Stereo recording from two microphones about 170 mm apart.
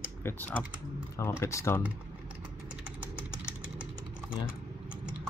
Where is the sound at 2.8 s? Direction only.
5° right (ahead or behind).